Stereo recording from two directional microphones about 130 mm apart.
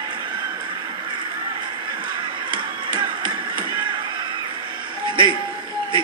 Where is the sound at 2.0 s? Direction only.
35° right (ahead or behind).